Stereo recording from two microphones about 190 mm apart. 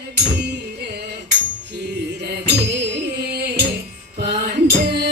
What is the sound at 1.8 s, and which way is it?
Music, 60° right (ahead or behind).